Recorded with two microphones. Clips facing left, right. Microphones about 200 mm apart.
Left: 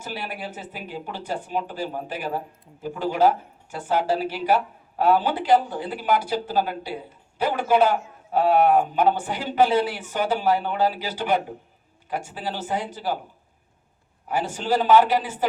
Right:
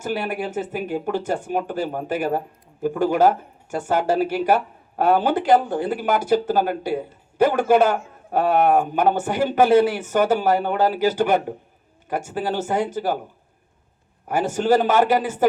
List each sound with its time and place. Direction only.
0.0 s speech: 50° right (ahead or behind)
14.3 s speech: 45° right (ahead or behind)